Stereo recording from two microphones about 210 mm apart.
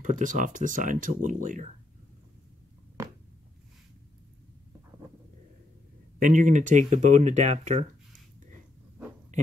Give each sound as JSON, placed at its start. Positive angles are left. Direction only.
{"t": 0.0, "sound": "speech", "side_deg": -40}
{"t": 6.1, "sound": "speech", "side_deg": -40}